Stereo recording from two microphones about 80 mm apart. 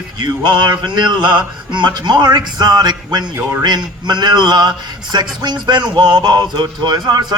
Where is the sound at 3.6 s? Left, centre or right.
Right.